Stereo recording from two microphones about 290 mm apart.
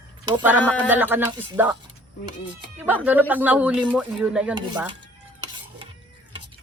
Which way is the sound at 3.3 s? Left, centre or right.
Centre.